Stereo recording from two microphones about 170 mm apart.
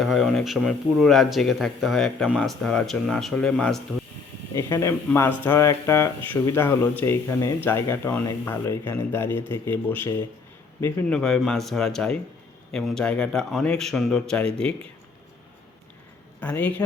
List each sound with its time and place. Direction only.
0.0 s speech: centre (ahead or behind)
4.5 s a man's voice: 15° left (ahead or behind)
11.2 s speech: 5° left (ahead or behind)
16.4 s speech: 10° left (ahead or behind)